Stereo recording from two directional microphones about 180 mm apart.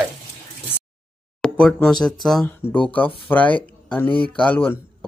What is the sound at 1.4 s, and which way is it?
Speech, 5° left (ahead or behind).